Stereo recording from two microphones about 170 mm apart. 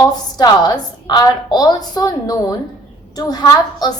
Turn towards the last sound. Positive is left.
turn(degrees=25)  # may be behind; listen again after turning